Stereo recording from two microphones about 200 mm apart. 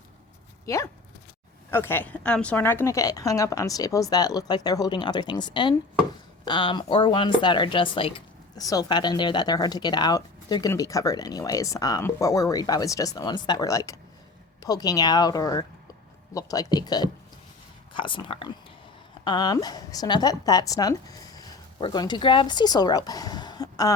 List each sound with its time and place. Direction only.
0.6 s speech: 15° left (ahead or behind)